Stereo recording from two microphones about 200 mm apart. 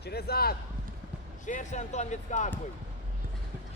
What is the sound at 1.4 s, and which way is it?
Speech, 40° left (ahead or behind).